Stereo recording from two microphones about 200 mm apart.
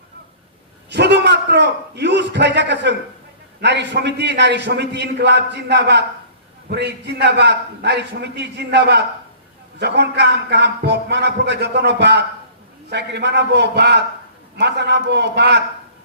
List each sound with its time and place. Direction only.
0.9 s a man's voice: 60° right (ahead or behind)